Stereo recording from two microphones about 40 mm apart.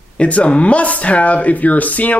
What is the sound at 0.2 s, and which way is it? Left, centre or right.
A man's voice, left.